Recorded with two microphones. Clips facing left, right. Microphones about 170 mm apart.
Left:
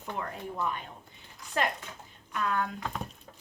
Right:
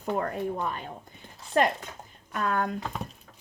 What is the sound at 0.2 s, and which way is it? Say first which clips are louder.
Speech: right 6 dB; 45° right (ahead or behind).